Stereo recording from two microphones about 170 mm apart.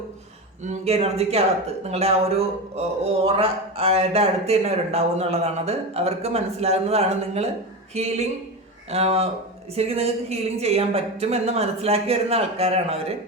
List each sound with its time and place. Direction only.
0.6 s speech: 40° right (ahead or behind)